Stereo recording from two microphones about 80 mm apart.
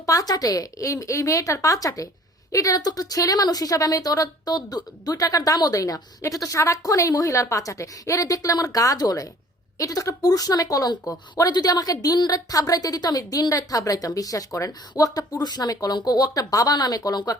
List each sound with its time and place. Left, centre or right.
0.0 s a woman's voice: left